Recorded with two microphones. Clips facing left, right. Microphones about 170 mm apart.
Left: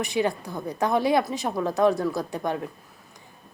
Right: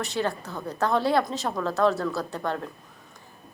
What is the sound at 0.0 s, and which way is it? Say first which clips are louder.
A woman's voice: left 3 dB; 15° left (ahead or behind).